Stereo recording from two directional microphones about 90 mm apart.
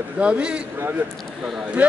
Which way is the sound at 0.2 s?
10° right (ahead or behind).